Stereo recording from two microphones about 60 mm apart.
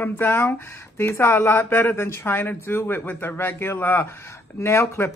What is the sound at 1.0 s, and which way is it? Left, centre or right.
Speech, left.